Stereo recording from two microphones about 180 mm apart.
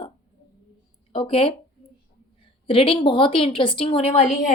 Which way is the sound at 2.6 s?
30° left (ahead or behind).